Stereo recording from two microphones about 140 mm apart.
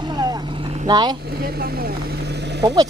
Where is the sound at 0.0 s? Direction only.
30° right (ahead or behind).